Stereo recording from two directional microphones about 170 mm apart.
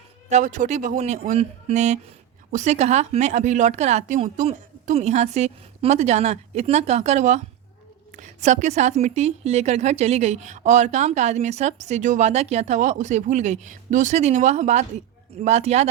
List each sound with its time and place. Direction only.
0.3 s a woman's voice: 45° right (ahead or behind)